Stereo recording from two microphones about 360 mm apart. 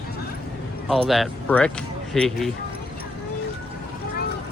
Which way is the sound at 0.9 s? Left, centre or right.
Centre.